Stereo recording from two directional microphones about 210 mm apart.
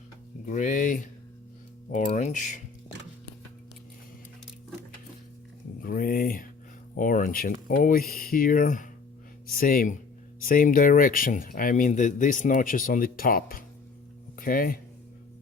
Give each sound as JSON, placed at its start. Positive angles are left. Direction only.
{"t": 0.4, "sound": "speech", "side_deg": 40}
{"t": 5.8, "sound": "speech", "side_deg": 40}